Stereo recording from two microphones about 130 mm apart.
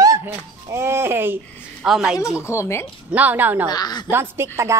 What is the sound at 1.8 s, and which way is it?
Speech, 5° right (ahead or behind).